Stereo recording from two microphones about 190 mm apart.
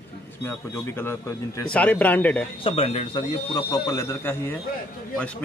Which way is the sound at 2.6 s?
30° left (ahead or behind).